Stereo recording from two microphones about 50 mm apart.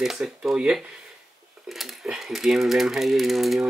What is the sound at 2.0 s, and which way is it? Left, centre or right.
Speech, centre.